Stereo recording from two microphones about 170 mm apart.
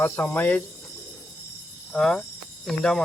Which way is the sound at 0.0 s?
10° left (ahead or behind).